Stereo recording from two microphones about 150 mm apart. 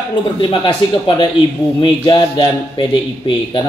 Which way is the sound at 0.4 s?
35° left (ahead or behind).